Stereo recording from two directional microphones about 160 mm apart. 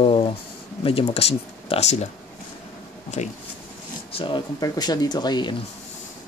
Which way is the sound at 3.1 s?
45° left (ahead or behind).